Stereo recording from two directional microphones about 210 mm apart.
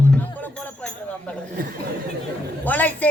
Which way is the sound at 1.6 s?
45° right (ahead or behind).